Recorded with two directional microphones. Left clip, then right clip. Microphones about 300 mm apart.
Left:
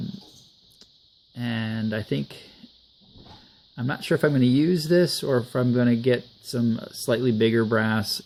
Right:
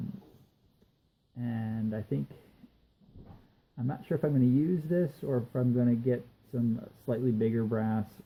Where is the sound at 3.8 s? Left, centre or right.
Left.